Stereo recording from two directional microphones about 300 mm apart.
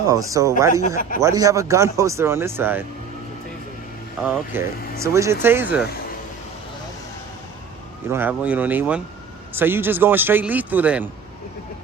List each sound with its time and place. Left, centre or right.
0.1 s speech: centre
0.7 s speech: left
1.2 s speech: centre
4.2 s speech: centre
8.1 s speech: centre